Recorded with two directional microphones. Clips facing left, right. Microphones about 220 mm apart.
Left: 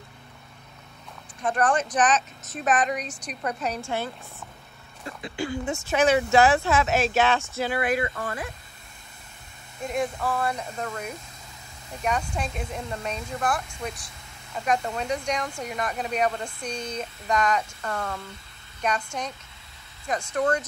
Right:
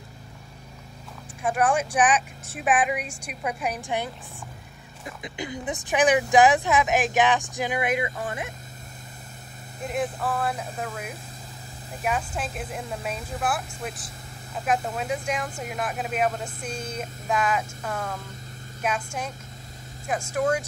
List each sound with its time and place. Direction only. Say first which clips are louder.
1.4 s speech: even; 10° right (ahead or behind)
9.8 s speech: even; 5° right (ahead or behind)